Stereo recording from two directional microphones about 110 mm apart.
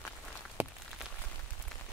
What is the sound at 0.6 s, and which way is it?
Rain on surface, 20° right (ahead or behind).